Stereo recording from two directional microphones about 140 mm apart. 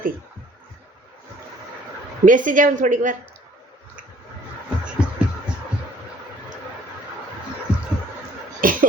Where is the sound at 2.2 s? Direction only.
70° right (ahead or behind).